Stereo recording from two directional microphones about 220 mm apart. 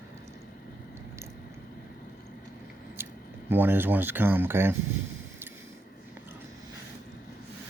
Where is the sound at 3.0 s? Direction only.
10° right (ahead or behind).